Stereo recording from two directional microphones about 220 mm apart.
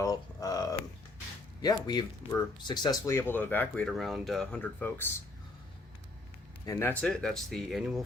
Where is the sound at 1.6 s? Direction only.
20° left (ahead or behind).